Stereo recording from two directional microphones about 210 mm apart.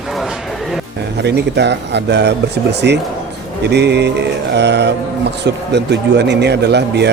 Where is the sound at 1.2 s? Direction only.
55° right (ahead or behind).